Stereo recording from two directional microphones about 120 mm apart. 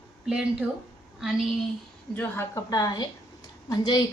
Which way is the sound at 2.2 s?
20° left (ahead or behind).